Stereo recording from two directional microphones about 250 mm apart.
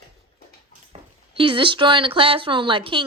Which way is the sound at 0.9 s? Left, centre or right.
Right.